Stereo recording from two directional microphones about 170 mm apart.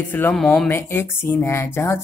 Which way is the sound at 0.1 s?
5° left (ahead or behind).